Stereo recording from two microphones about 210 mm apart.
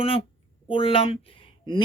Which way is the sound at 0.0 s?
25° left (ahead or behind).